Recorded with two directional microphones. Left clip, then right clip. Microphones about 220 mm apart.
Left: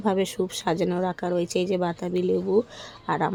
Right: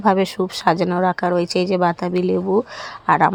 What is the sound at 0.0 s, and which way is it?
Speech, 15° right (ahead or behind).